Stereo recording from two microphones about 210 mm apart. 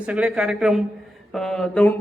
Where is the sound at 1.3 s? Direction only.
Centre (ahead or behind).